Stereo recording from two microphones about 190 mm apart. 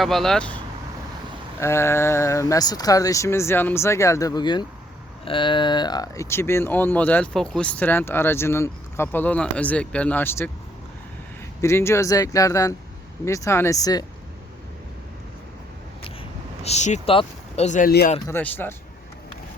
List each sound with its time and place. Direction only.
0.0 s speech: centre (ahead or behind)
11.6 s speech: 15° left (ahead or behind)
16.6 s speech: 35° left (ahead or behind)
18.3 s speech: 10° left (ahead or behind)